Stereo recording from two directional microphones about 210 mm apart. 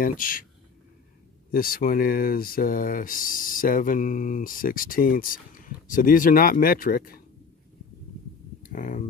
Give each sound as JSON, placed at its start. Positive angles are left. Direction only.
{"t": 0.0, "sound": "speech", "side_deg": 40}
{"t": 1.5, "sound": "speech", "side_deg": 45}
{"t": 8.7, "sound": "speech", "side_deg": 40}